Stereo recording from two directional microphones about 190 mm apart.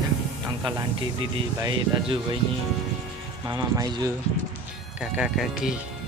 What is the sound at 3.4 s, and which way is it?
Speech, 20° right (ahead or behind).